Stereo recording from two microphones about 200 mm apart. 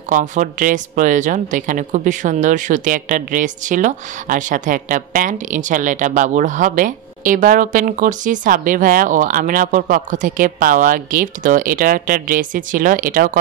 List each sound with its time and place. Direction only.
0.1 s speech: 40° right (ahead or behind)